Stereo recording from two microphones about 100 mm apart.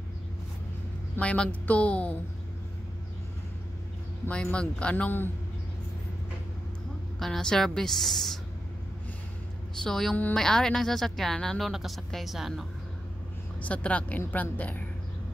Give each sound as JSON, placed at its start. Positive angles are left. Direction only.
{"t": 1.1, "sound": "a woman's voice", "side_deg": 10}
{"t": 4.3, "sound": "a woman's voice", "side_deg": 10}
{"t": 7.2, "sound": "speech", "side_deg": 5}
{"t": 9.8, "sound": "speech", "side_deg": 5}
{"t": 13.6, "sound": "a woman's voice", "side_deg": 15}